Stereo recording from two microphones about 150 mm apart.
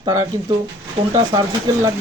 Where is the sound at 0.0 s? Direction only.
25° right (ahead or behind).